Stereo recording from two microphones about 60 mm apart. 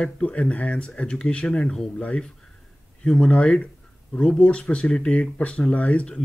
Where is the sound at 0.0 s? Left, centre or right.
Left.